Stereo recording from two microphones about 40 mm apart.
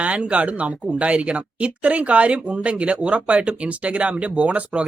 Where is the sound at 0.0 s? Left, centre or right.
Right.